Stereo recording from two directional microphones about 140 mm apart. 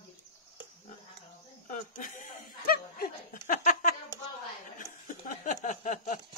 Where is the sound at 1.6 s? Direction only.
70° left (ahead or behind); by 3.4 s 90° left.